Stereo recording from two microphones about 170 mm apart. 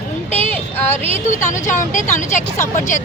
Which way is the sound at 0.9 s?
45° left (ahead or behind).